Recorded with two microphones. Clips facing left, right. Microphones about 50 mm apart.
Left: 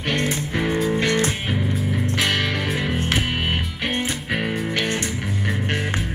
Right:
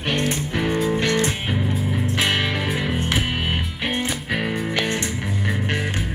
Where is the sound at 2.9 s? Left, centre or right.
Centre.